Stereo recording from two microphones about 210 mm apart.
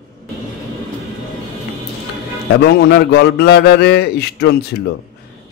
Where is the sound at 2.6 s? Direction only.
50° left (ahead or behind).